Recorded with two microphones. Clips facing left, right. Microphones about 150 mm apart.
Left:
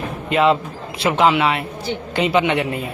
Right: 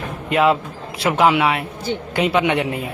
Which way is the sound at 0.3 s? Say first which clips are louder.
Even; 5° right (ahead or behind).